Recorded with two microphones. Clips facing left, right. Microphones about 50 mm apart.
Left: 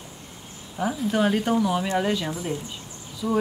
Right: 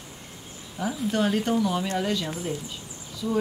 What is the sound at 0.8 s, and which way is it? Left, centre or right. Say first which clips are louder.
Speech: left 3 dB; left.